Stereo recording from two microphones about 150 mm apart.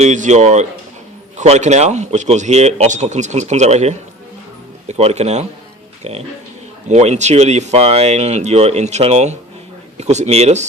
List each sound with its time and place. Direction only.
0.0 s speech: 50° right (ahead or behind)